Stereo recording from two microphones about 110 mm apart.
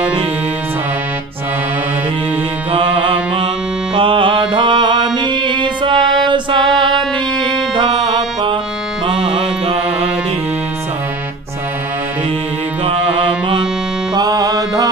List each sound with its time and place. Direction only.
2.7 s music: 55° right (ahead or behind)
3.9 s mantra: 50° right (ahead or behind)
7.7 s music: 50° right (ahead or behind)
12.8 s music: 55° right (ahead or behind)
14.1 s music: 35° right (ahead or behind)